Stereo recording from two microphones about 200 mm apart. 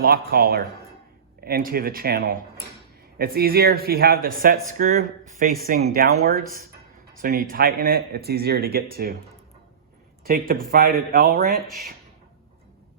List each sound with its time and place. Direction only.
0.0 s speech: 50° right (ahead or behind)
10.2 s speech: 45° right (ahead or behind)